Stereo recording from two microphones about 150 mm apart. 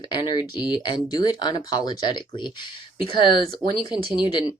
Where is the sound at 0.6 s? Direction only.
5° right (ahead or behind).